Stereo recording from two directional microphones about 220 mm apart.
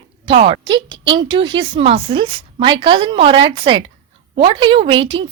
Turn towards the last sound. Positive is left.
turn(degrees=-25)  # may be behind; listen again after turning